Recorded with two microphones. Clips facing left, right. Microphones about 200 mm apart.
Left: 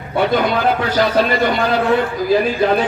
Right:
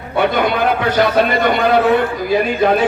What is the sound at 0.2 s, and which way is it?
A man's voice, 60° right (ahead or behind).